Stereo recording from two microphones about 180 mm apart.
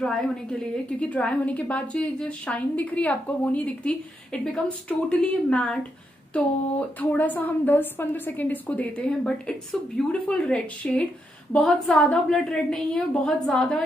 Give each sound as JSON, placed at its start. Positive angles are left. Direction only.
{"t": 0.0, "sound": "a woman's voice", "side_deg": 5}
{"t": 7.0, "sound": "a woman's voice", "side_deg": 10}